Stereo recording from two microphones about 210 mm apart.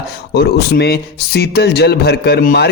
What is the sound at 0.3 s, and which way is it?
A man's voice, 50° left (ahead or behind).